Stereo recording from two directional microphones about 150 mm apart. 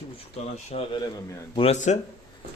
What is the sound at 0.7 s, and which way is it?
Speech, 50° left (ahead or behind).